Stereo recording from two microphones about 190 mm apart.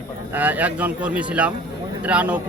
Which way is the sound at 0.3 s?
10° right (ahead or behind).